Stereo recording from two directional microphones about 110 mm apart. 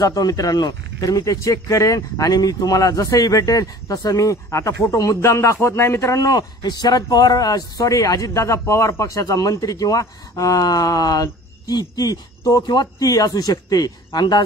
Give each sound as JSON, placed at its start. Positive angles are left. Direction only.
{"t": 0.0, "sound": "speech", "side_deg": 35}